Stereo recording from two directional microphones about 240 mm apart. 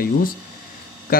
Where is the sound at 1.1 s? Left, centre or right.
Left.